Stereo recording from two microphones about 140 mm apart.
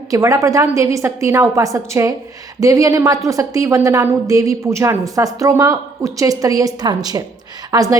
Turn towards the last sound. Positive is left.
turn(degrees=-25)  # may be behind; listen again after turning